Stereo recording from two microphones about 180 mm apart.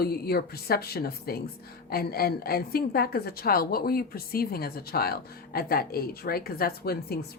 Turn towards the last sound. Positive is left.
turn(degrees=60)  # may be behind; listen again after turning